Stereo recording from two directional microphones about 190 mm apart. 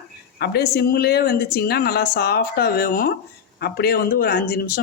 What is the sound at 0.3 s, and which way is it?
A woman's voice, 60° left (ahead or behind).